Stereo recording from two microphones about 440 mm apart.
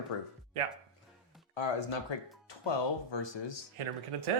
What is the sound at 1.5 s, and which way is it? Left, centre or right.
Speech, left.